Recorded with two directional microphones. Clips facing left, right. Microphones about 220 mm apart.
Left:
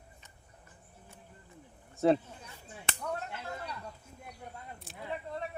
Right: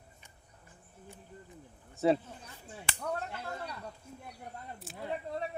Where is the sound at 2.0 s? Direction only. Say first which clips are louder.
Left 1 dB; centre (ahead or behind).